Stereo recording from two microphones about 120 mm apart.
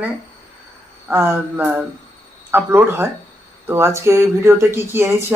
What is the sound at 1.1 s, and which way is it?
Speech, 20° right (ahead or behind).